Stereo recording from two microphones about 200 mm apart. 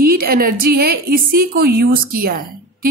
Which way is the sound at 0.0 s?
50° right (ahead or behind).